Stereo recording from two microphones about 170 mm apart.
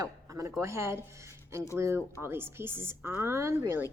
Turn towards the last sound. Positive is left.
turn(degrees=-15)  # may be behind; listen again after turning